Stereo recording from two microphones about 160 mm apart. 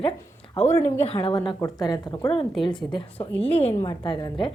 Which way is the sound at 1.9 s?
25° left (ahead or behind).